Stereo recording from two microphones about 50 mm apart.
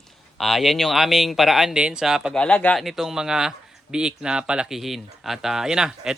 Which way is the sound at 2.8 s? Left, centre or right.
Centre.